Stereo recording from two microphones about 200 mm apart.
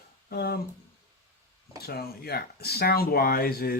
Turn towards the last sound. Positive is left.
turn(degrees=50)  # may be behind; listen again after turning